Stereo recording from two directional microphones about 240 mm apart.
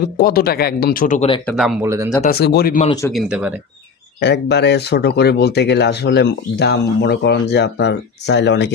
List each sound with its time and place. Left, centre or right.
0.2 s speech: left
1.8 s speech: centre
2.2 s speech: left
2.8 s speech: centre
3.1 s speech: centre
4.2 s speech: left